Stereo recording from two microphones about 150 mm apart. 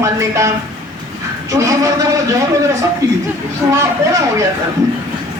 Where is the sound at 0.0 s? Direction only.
20° right (ahead or behind).